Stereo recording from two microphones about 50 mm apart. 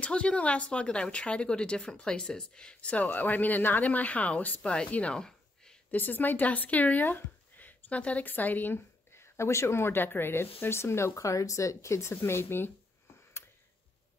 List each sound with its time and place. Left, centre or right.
0.0 s a woman's voice: left
3.1 s a woman's voice: left
5.1 s a sound: centre
5.9 s speech: left
8.7 s speech: left